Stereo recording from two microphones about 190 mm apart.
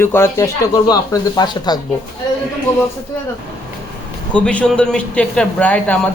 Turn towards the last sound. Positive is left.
turn(degrees=5)  # may be behind; listen again after turning